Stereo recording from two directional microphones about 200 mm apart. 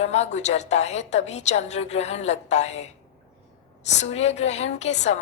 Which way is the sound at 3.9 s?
35° left (ahead or behind).